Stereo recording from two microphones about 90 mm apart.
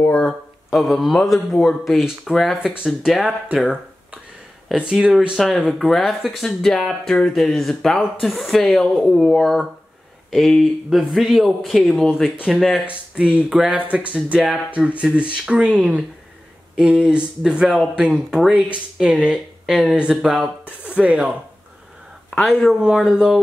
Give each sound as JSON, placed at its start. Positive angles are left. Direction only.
{"t": 0.0, "sound": "speech", "side_deg": 10}
{"t": 0.3, "sound": "speech", "side_deg": 0}
{"t": 3.5, "sound": "a sound", "side_deg": -10}
{"t": 4.6, "sound": "speech", "side_deg": -10}
{"t": 22.3, "sound": "speech", "side_deg": 0}